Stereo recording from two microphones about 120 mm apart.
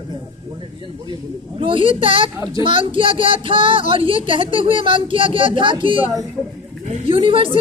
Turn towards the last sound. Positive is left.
turn(degrees=-45)  # may be behind; listen again after turning